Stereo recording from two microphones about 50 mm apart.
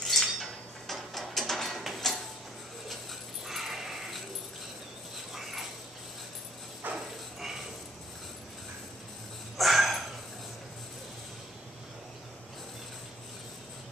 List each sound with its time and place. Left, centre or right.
0.0 s dishes: centre
3.4 s a sound: centre
5.1 s dog: centre
6.8 s dog: right
7.3 s dog: centre
9.6 s a sound: centre